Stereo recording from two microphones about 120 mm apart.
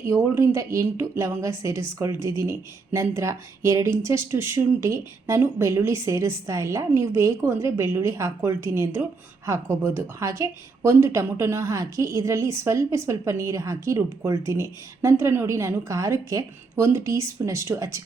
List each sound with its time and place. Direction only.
0.1 s a woman's voice: 25° right (ahead or behind)